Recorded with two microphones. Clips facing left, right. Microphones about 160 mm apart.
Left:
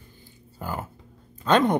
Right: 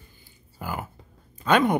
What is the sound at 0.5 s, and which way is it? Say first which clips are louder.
Speech: even; 10° right (ahead or behind).